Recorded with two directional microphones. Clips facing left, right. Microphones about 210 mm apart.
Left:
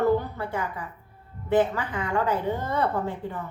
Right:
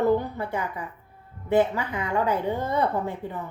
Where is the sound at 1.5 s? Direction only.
15° right (ahead or behind).